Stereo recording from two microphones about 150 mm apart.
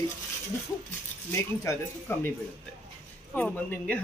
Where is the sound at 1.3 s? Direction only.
20° left (ahead or behind).